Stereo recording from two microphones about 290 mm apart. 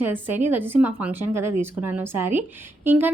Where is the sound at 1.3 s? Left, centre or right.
Right.